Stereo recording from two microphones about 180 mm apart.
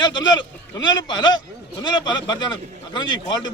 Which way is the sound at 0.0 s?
25° left (ahead or behind).